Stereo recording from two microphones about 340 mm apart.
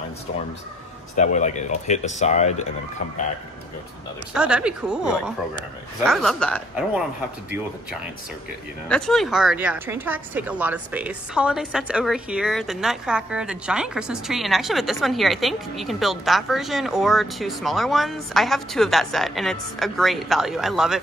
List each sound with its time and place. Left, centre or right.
1.1 s speech: left
4.3 s a woman's voice: centre
8.8 s a woman's voice: centre